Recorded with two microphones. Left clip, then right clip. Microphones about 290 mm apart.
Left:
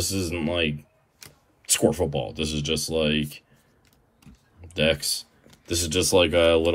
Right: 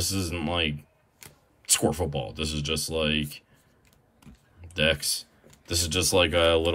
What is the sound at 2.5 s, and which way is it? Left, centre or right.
Speech, centre.